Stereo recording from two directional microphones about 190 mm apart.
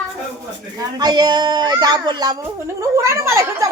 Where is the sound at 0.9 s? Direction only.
20° right (ahead or behind).